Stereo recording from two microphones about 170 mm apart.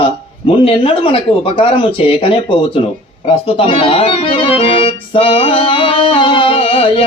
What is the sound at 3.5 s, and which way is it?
Speech, 30° left (ahead or behind).